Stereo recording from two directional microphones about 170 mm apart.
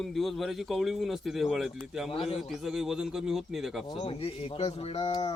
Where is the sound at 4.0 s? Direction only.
35° left (ahead or behind).